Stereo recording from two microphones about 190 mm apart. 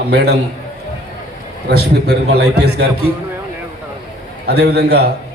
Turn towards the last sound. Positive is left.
turn(degrees=-60)  # may be behind; listen again after turning